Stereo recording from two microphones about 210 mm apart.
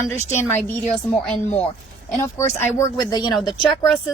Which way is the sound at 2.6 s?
15° left (ahead or behind).